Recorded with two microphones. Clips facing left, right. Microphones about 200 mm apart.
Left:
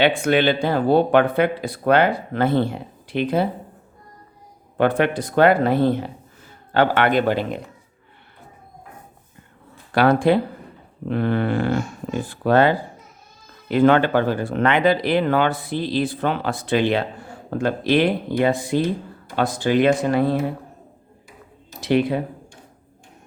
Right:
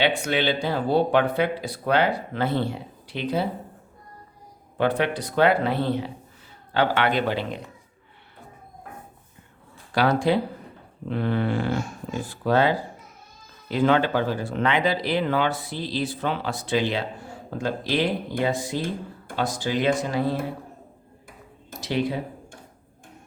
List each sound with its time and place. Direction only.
0.0 s speech: 55° left (ahead or behind)
4.8 s speech: 55° left (ahead or behind)
9.9 s speech: 55° left (ahead or behind)
21.8 s speech: 60° left (ahead or behind)